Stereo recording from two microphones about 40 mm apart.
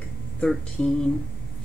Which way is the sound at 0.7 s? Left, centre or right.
Centre.